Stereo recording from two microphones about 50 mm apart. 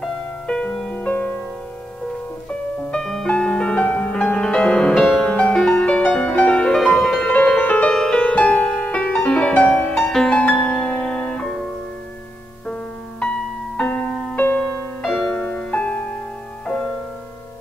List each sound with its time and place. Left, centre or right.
0.5 s music: centre
0.9 s music: left
2.9 s music: centre
4.9 s music: centre
5.2 s music: centre
5.8 s music: left
6.7 s music: centre
7.2 s music: left
7.9 s music: centre
13.7 s music: centre
14.3 s music: left
15.0 s music: centre
15.3 s music: left
16.6 s music: centre